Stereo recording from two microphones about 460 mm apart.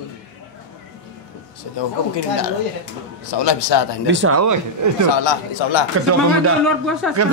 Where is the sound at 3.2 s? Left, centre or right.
Left.